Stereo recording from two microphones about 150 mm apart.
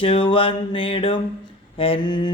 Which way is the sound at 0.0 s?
35° left (ahead or behind).